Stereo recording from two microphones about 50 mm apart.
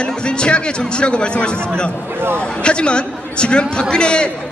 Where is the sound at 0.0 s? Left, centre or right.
Centre.